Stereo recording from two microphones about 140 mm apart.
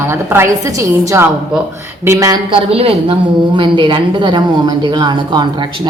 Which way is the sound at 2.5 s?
40° right (ahead or behind).